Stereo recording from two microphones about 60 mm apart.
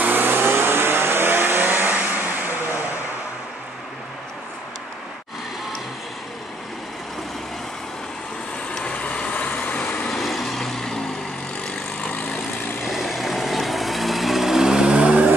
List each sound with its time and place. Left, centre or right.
0.0 s vehicle: right
8.8 s vehicle: left
10.0 s vehicle: centre
12.8 s vehicle: centre; by 15.3 s right